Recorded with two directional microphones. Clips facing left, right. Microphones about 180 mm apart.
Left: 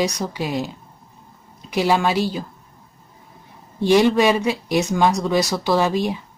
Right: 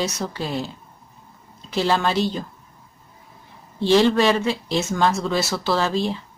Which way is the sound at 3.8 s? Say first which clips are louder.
Left 1 dB; 15° left (ahead or behind).